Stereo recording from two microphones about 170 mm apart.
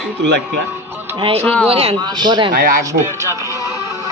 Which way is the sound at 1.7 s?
35° right (ahead or behind).